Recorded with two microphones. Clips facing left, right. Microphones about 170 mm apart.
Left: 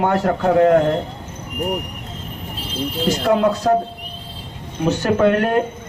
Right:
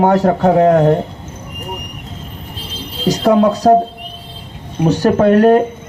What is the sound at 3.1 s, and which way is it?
Speech, 35° right (ahead or behind).